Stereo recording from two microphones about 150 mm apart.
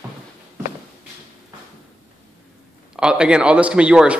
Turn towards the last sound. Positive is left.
turn(degrees=-5)  # may be behind; listen again after turning